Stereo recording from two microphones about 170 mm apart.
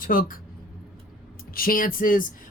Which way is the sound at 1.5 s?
60° left (ahead or behind).